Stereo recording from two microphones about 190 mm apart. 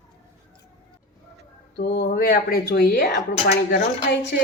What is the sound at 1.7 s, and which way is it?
A woman's voice, 60° left (ahead or behind).